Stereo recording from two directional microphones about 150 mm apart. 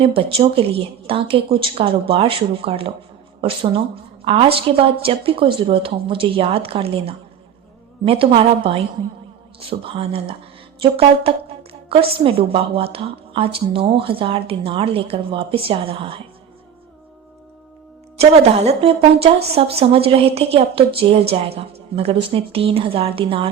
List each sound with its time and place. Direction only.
0.0 s speech: 40° right (ahead or behind)
18.2 s speech: 45° right (ahead or behind)